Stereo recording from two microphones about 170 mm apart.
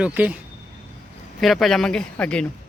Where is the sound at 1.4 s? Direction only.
Centre (ahead or behind).